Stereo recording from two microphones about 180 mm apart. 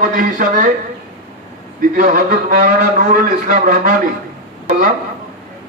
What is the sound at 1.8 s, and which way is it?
A man's voice, 50° right (ahead or behind).